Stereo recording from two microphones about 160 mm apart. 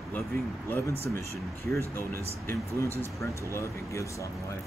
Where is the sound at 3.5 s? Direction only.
20° left (ahead or behind).